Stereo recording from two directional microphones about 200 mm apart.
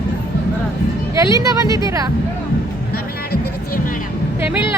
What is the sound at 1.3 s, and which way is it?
Speech, 15° right (ahead or behind).